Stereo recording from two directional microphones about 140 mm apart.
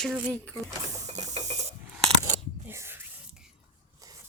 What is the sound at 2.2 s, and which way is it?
Whispering, 20° right (ahead or behind).